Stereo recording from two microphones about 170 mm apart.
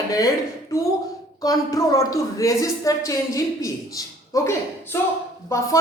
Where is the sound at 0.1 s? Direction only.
20° left (ahead or behind).